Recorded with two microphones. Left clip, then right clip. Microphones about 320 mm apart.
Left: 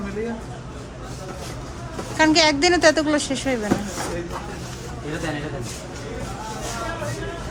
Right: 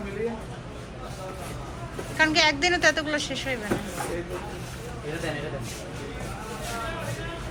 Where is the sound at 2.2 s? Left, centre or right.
Centre.